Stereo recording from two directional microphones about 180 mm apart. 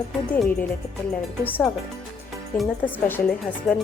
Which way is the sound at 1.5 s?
10° left (ahead or behind).